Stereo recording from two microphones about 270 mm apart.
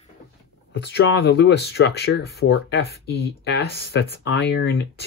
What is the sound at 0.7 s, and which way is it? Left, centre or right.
Speech, left.